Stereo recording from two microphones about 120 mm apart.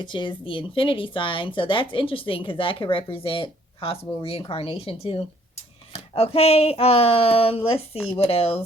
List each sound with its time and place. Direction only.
0.0 s a woman's voice: 40° left (ahead or behind)